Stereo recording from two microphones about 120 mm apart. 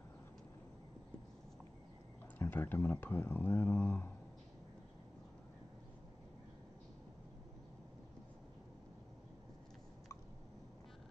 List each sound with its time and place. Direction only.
2.3 s speech: 15° left (ahead or behind)